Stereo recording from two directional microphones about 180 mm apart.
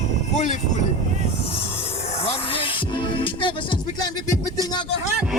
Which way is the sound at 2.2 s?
30° left (ahead or behind).